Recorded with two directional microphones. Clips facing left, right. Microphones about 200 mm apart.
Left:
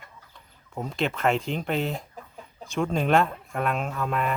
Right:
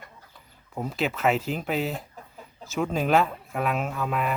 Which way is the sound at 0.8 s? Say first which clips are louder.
Even; 5° right (ahead or behind).